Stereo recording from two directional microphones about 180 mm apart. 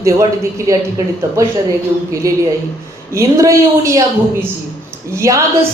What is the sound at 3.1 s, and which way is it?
Speech, 15° right (ahead or behind).